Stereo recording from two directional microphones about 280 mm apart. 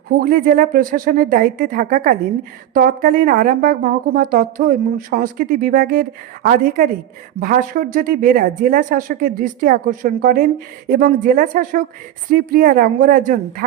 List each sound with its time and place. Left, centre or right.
0.2 s a woman's voice: right